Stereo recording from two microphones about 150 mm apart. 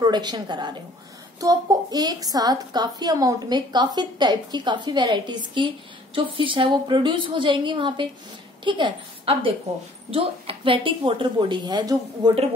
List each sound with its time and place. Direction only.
0.0 s a woman's voice: 30° right (ahead or behind)